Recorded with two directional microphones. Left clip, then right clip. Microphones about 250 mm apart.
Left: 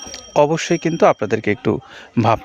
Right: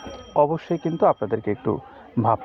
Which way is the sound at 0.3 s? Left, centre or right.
Left.